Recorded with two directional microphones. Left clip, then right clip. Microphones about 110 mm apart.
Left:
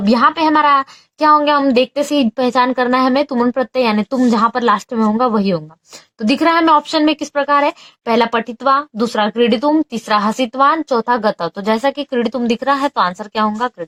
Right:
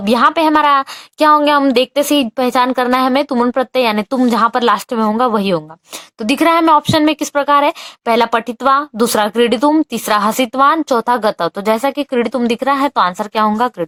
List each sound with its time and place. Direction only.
0.0 s speech: 45° right (ahead or behind)
13.6 s a woman's voice: 55° right (ahead or behind)